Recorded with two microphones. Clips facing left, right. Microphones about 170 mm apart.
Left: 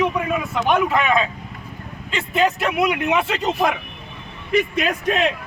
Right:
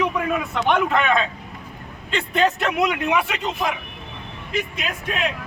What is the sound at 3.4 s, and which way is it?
Speech, 50° left (ahead or behind).